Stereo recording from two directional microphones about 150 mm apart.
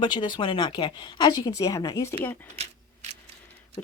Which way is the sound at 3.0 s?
50° right (ahead or behind).